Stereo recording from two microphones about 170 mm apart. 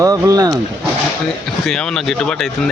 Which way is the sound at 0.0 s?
20° right (ahead or behind).